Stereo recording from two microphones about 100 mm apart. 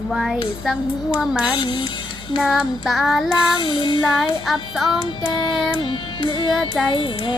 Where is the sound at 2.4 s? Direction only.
5° right (ahead or behind).